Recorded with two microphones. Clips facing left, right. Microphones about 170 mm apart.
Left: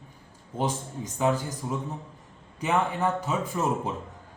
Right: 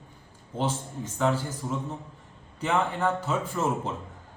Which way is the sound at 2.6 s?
10° left (ahead or behind).